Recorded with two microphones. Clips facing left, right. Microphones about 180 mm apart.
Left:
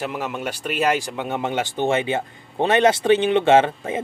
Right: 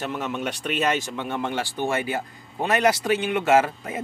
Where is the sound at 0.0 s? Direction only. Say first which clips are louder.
Left 1 dB; 10° left (ahead or behind).